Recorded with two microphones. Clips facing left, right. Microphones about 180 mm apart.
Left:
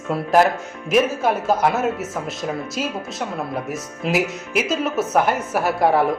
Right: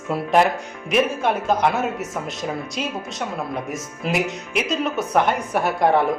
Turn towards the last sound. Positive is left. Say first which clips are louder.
# left 1 dB
turn(degrees=5)  # may be behind; listen again after turning